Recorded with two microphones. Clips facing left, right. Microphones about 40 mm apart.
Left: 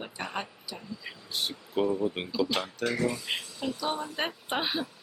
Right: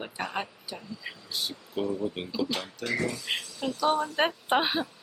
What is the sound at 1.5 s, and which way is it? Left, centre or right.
Speech, left.